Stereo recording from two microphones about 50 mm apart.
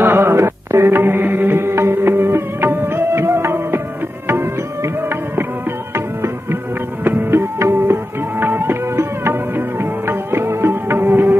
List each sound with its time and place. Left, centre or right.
0.0 s music: right